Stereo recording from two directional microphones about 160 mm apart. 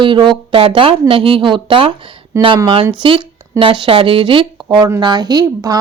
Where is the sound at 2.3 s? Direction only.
15° right (ahead or behind).